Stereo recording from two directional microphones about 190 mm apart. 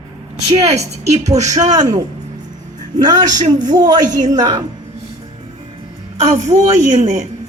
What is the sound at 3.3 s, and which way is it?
A woman's voice, 40° right (ahead or behind).